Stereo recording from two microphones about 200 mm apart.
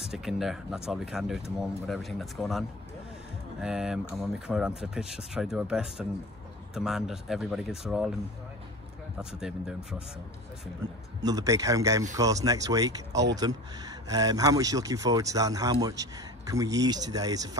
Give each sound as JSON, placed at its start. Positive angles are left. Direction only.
{"t": 0.0, "sound": "speech", "side_deg": 0}
{"t": 3.6, "sound": "speech", "side_deg": -5}
{"t": 9.2, "sound": "speech", "side_deg": -5}
{"t": 11.1, "sound": "speech", "side_deg": -20}